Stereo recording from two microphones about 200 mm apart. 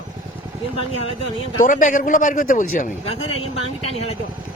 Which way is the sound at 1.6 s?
40° left (ahead or behind).